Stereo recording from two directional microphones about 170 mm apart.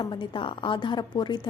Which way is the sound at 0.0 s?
25° left (ahead or behind).